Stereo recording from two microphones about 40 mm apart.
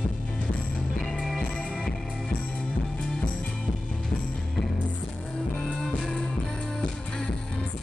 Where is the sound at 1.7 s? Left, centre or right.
Centre.